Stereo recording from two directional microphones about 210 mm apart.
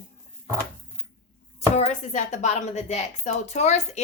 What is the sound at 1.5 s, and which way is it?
Speech, 30° left (ahead or behind).